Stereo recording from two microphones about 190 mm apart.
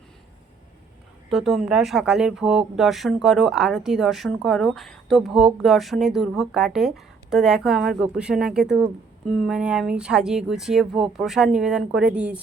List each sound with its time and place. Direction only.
1.3 s speech: centre (ahead or behind)